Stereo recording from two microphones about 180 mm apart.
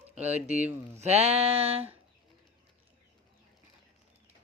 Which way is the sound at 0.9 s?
35° right (ahead or behind).